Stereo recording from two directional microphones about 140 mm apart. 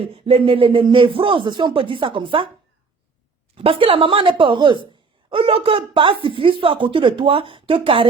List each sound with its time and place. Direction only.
0.0 s speech: 40° right (ahead or behind)
3.5 s speech: 40° right (ahead or behind)